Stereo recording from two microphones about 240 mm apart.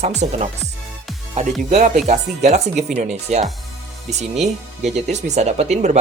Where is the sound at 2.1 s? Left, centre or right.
Right.